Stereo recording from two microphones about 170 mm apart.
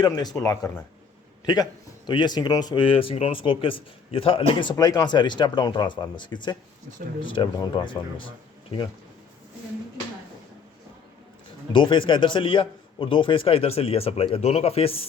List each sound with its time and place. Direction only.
0.0 s speech: 25° left (ahead or behind)
2.0 s speech: 25° left (ahead or behind)
11.7 s a man's voice: 30° left (ahead or behind)